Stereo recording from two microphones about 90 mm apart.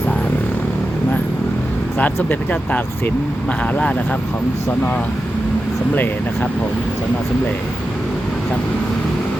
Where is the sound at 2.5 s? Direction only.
15° left (ahead or behind).